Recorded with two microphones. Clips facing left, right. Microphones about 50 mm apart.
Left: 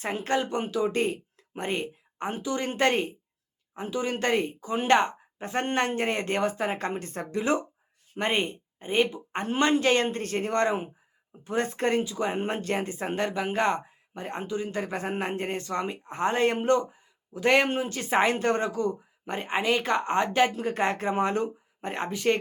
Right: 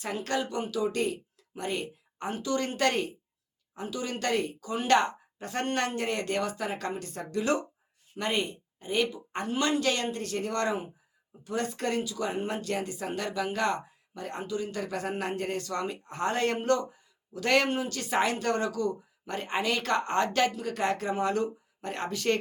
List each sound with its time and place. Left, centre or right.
0.0 s speech: left
20.5 s speech: left